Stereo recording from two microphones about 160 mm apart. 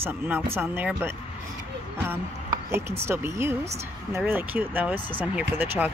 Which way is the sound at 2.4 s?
15° right (ahead or behind).